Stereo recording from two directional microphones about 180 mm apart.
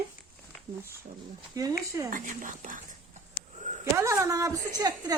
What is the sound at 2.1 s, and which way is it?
Speech, 45° right (ahead or behind).